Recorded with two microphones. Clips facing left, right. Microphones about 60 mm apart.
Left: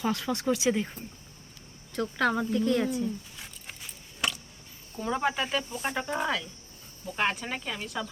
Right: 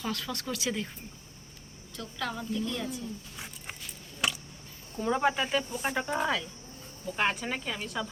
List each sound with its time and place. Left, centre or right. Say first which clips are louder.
0.0 s speech: left 6 dB; left
2.0 s speech: left 9 dB; left
3.3 s a sound: right 2 dB; centre
4.9 s speech: right 1 dB; centre